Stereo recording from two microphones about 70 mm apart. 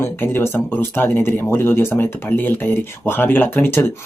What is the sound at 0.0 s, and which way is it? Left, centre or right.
Speech, left.